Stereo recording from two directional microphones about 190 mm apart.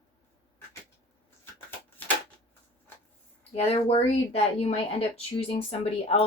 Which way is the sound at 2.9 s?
10° left (ahead or behind).